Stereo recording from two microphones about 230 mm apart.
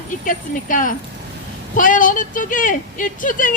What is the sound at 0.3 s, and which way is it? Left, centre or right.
Speech, left.